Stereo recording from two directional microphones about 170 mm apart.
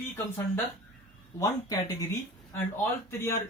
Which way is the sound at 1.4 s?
20° left (ahead or behind).